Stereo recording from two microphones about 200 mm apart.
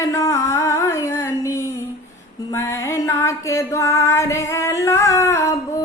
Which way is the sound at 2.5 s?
15° left (ahead or behind).